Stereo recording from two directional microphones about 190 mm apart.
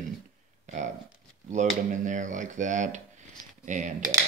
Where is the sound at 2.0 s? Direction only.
40° right (ahead or behind).